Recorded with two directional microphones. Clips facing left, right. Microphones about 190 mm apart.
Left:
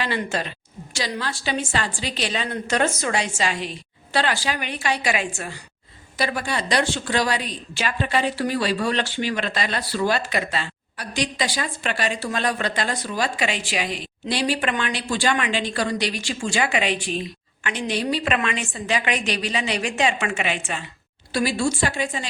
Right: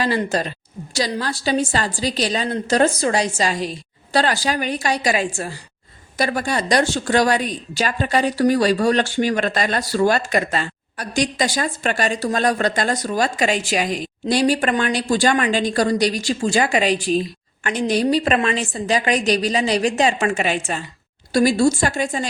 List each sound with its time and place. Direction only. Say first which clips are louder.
0.0 s a woman's voice: right 5 dB; 40° right (ahead or behind)